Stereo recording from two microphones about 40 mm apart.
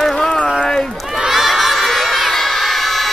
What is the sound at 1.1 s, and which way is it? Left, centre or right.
Crowd, centre.